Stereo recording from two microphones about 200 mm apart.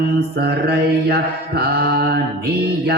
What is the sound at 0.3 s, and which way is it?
Mantra, 55° right (ahead or behind).